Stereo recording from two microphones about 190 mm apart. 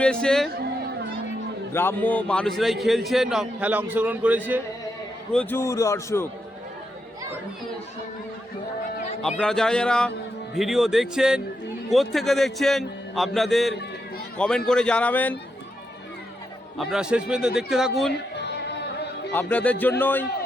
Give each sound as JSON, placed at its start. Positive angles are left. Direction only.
{"t": 0.0, "sound": "a man's voice", "side_deg": 5}
{"t": 1.7, "sound": "a man's voice", "side_deg": 10}
{"t": 5.3, "sound": "a man's voice", "side_deg": 10}
{"t": 9.4, "sound": "a man's voice", "side_deg": 5}
{"t": 16.7, "sound": "a man's voice", "side_deg": 0}
{"t": 18.3, "sound": "music", "side_deg": 65}
{"t": 19.3, "sound": "a man's voice", "side_deg": 10}